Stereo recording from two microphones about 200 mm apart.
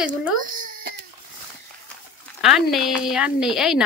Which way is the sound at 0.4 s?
45° right (ahead or behind).